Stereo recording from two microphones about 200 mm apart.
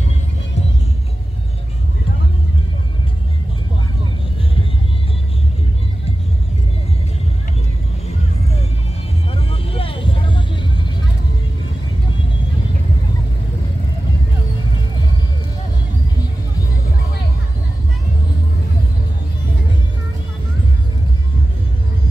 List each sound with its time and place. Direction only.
9.3 s vehicle: 30° left (ahead or behind)